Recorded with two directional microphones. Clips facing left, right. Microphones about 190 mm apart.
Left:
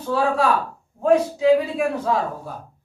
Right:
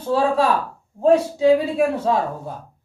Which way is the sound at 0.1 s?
30° right (ahead or behind).